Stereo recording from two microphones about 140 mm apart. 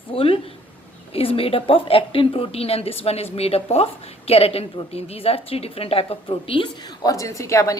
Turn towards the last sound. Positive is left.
turn(degrees=20)  # may be behind; listen again after turning